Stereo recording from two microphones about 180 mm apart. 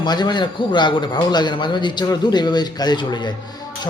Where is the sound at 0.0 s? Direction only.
25° left (ahead or behind).